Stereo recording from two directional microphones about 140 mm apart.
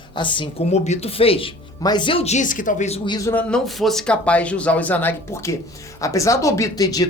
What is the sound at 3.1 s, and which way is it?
Speech, 25° left (ahead or behind).